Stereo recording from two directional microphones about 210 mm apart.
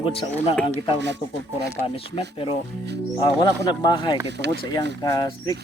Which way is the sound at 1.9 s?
25° left (ahead or behind).